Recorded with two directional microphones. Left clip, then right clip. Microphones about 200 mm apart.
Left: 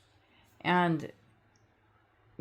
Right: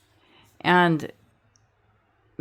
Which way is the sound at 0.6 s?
45° right (ahead or behind).